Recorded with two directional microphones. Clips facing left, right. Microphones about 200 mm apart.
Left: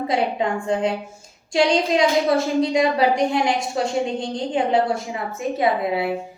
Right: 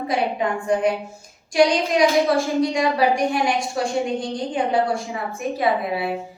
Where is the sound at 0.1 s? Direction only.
25° left (ahead or behind).